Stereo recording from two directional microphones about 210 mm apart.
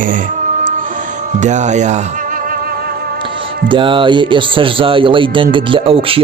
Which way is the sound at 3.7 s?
25° right (ahead or behind).